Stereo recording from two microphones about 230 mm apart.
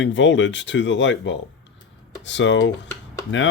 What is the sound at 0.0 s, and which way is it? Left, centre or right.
Speech, left.